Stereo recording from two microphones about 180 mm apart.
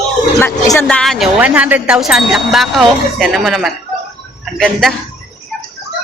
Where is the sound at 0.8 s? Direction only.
Centre (ahead or behind).